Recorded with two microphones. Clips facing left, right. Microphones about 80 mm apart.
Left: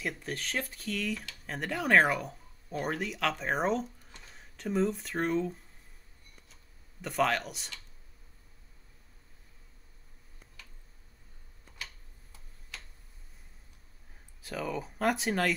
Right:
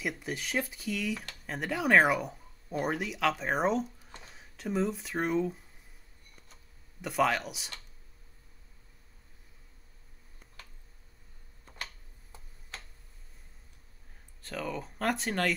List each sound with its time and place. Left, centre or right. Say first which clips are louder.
0.0 s speech: right 1 dB; centre
7.0 s speech: right 1 dB; centre
11.8 s tick-tock: right 3 dB; right
14.4 s speech: left 1 dB; centre